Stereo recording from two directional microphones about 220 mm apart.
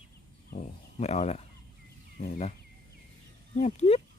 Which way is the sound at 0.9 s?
30° left (ahead or behind).